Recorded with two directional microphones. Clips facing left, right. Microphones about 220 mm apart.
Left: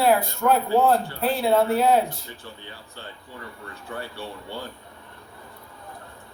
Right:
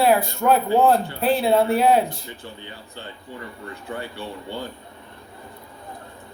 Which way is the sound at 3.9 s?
20° right (ahead or behind).